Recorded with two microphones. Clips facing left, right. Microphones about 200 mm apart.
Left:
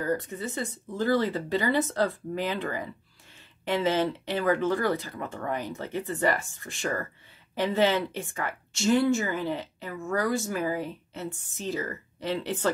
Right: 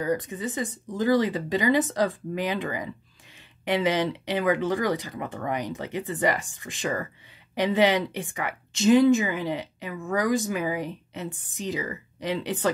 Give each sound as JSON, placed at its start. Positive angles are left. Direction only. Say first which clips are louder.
{"t": 0.0, "sound": "speech", "louder": "right 2 dB", "side_deg": -15}